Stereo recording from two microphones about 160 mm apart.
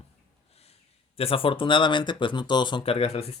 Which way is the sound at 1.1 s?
35° left (ahead or behind).